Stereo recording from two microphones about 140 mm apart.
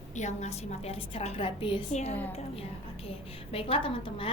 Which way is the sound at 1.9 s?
50° left (ahead or behind).